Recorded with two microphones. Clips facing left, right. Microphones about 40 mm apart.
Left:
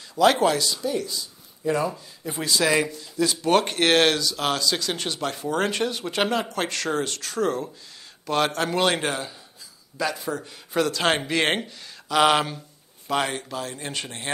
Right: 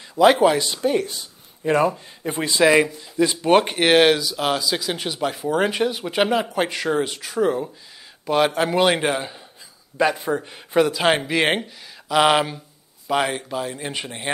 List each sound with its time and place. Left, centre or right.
0.1 s speech: centre
0.7 s speech: right
2.4 s speech: right